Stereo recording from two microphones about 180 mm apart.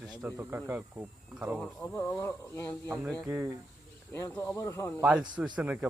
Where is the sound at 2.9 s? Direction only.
15° right (ahead or behind).